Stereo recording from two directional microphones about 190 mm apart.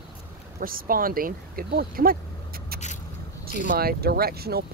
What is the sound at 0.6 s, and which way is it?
Speech, 50° right (ahead or behind).